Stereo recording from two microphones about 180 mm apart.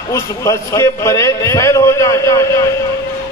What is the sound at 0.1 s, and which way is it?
A man's voice, 15° left (ahead or behind).